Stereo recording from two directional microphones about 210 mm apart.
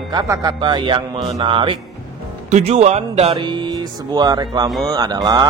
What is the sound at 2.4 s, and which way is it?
Speech, 30° right (ahead or behind).